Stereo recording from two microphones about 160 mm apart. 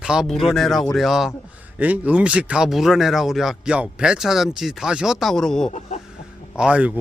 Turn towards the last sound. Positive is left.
turn(degrees=-10)  # may be behind; listen again after turning